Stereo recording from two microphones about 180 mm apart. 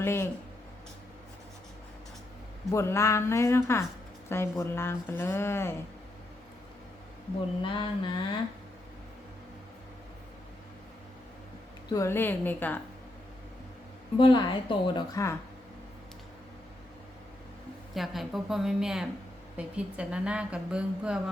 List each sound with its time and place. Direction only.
0.0 s speech: 15° left (ahead or behind)
2.6 s speech: 15° left (ahead or behind)
7.6 s a woman's voice: 25° left (ahead or behind)
11.9 s speech: 15° left (ahead or behind)
14.2 s a woman's voice: 25° left (ahead or behind)
17.9 s a woman's voice: centre (ahead or behind)